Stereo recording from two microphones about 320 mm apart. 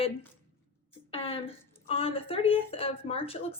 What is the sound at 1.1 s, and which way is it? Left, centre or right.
A woman's voice, centre.